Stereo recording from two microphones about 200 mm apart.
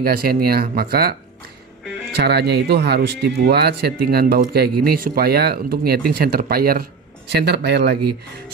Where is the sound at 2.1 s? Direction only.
55° right (ahead or behind).